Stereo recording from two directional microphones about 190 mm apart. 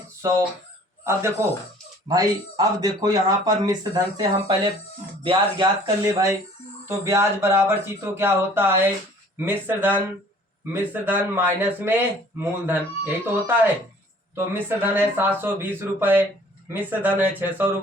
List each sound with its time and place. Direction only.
0.2 s speech: 15° right (ahead or behind)
2.0 s speech: 20° right (ahead or behind)